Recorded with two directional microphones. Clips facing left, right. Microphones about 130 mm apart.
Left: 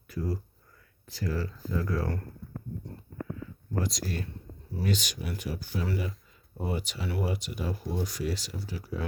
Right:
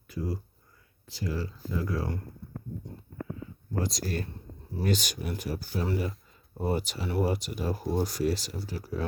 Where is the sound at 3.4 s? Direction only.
35° right (ahead or behind).